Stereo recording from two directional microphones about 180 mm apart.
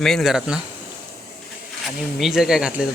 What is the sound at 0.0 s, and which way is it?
Speech, centre (ahead or behind).